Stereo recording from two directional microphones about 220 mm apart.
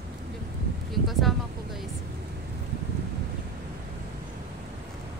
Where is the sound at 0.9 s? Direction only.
Centre (ahead or behind).